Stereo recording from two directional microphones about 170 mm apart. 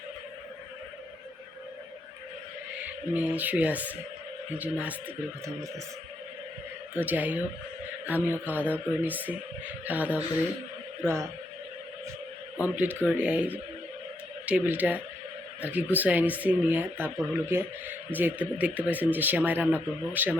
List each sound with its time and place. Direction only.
3.2 s speech: 10° right (ahead or behind)
6.9 s speech: 10° right (ahead or behind)
12.6 s speech: 10° right (ahead or behind)